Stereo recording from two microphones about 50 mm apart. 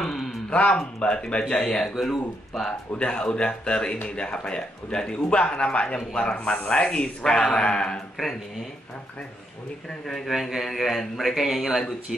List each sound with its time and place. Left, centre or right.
0.0 s a sound: centre
0.5 s speech: centre
3.0 s speech: left
9.8 s speech: centre